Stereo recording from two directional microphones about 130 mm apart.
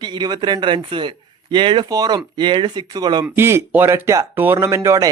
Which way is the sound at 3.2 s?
20° right (ahead or behind).